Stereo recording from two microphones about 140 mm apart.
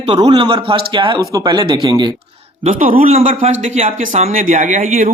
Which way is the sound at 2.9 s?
50° right (ahead or behind).